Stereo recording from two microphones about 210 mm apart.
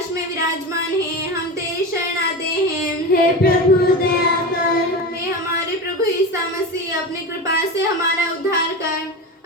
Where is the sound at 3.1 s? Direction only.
45° left (ahead or behind).